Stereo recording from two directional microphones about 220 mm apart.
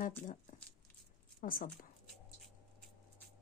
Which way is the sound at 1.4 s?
40° left (ahead or behind).